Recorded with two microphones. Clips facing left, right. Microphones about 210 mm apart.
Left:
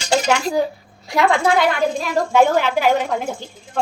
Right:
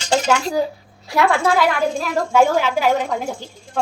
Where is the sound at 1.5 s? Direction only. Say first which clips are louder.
Left 1 dB; centre (ahead or behind).